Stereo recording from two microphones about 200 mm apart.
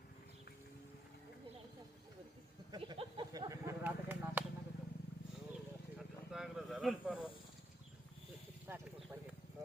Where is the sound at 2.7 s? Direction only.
25° right (ahead or behind).